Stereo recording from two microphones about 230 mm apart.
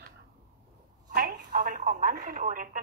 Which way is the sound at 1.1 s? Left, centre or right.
Right.